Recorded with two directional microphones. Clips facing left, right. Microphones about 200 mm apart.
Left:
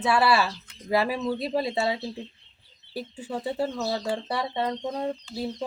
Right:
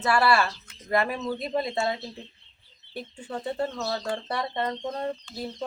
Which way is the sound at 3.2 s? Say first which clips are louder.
Left 1 dB; 5° left (ahead or behind).